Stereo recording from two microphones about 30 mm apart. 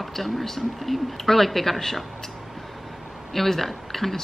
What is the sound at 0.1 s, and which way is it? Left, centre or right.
A woman's voice, centre.